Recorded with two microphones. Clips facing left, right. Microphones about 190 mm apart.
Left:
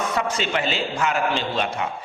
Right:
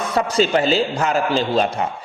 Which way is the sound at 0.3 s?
35° right (ahead or behind).